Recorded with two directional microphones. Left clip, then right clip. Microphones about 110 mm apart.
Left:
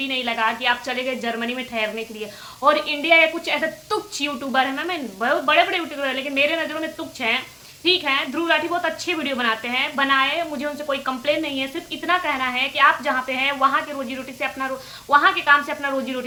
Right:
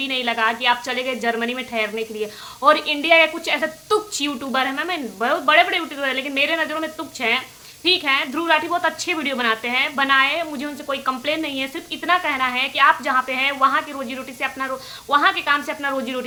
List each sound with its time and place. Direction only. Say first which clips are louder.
0.0 s a woman's voice: right 2 dB; 40° right (ahead or behind)